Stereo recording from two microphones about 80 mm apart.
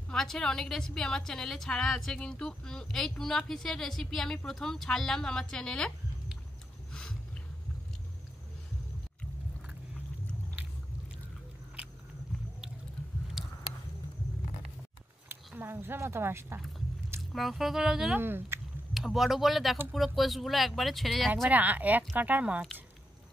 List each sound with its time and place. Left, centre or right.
0.1 s a woman's voice: centre
6.9 s a sound: centre
13.4 s biting: centre
15.2 s speech: right
17.2 s speech: centre
18.1 s speech: right
18.9 s a woman's voice: centre
21.5 s speech: centre